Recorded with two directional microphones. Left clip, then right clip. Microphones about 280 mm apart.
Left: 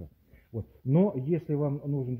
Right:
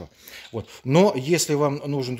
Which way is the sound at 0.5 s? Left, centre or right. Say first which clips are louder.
Right 8 dB; right.